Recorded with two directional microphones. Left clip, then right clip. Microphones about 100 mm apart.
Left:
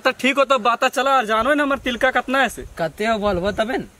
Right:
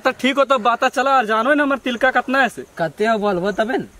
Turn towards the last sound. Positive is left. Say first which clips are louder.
# right 2 dB
turn(degrees=5)  # may be behind; listen again after turning